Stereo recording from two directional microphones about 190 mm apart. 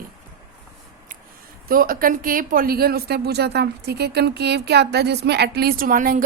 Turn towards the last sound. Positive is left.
turn(degrees=-45)  # may be behind; listen again after turning